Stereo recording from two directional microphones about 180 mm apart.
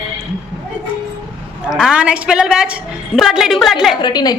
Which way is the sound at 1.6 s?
5° right (ahead or behind).